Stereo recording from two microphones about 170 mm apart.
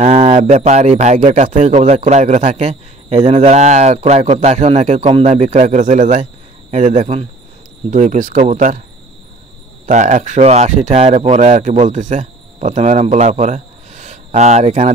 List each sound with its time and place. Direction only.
0.0 s a man's voice: 40° right (ahead or behind)
9.8 s speech: 50° right (ahead or behind)